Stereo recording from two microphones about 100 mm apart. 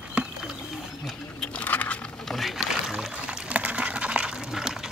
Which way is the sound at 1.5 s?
15° left (ahead or behind).